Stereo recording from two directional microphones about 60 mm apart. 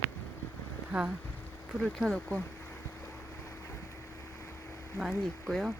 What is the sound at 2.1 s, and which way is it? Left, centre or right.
Speech, centre.